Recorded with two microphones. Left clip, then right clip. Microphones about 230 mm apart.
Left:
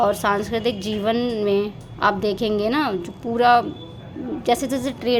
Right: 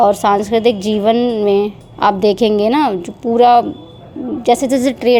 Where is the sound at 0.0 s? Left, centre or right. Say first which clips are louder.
Right 8 dB; right.